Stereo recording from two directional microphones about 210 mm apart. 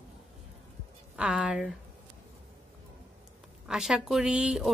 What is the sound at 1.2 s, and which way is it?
Speech, 5° right (ahead or behind).